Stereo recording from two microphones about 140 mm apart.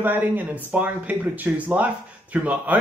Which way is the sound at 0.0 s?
15° right (ahead or behind).